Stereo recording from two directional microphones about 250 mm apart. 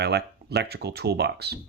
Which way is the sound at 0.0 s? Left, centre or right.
Right.